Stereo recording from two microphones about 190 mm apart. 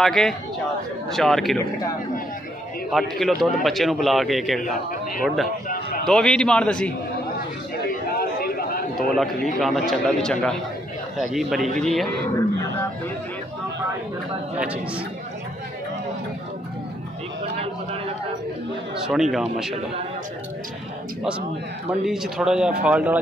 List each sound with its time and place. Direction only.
0.0 s speech: centre (ahead or behind)
2.9 s speech: centre (ahead or behind)
7.8 s a sound: 55° left (ahead or behind)
9.1 s speech: centre (ahead or behind)
14.6 s a man's voice: 5° right (ahead or behind)
19.3 s speech: centre (ahead or behind)
22.0 s a man's voice: 5° right (ahead or behind)